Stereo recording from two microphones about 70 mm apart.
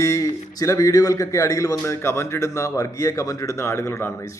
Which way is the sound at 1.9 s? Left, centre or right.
Left.